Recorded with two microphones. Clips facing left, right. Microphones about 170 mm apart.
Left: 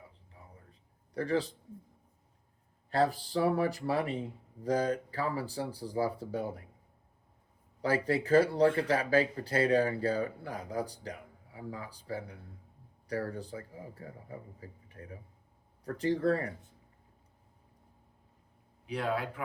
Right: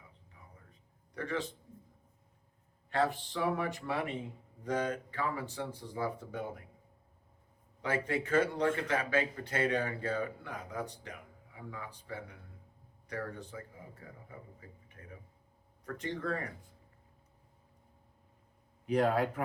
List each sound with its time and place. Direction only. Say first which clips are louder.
0.4 s a sound: left 4 dB; 30° left (ahead or behind)
2.9 s speech: left 3 dB; 35° left (ahead or behind)
7.8 s speech: left 4 dB; 35° left (ahead or behind)
18.9 s speech: right 5 dB; 45° right (ahead or behind)